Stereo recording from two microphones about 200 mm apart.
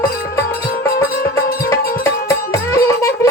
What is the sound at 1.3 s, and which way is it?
Music, 15° left (ahead or behind).